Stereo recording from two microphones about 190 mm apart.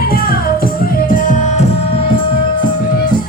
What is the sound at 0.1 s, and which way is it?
Music, 50° left (ahead or behind).